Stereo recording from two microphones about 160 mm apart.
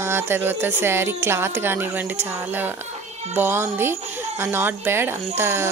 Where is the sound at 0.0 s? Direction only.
15° right (ahead or behind).